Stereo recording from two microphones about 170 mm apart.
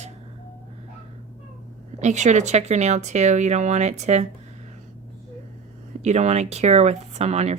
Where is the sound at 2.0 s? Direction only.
45° right (ahead or behind).